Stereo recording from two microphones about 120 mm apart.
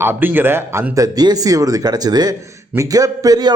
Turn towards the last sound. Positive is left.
turn(degrees=-30)  # may be behind; listen again after turning